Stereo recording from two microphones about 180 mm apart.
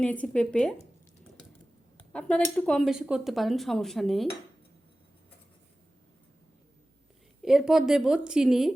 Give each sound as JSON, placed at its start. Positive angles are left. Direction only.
{"t": 0.0, "sound": "speech", "side_deg": 5}
{"t": 2.0, "sound": "speech", "side_deg": 5}
{"t": 7.4, "sound": "speech", "side_deg": 0}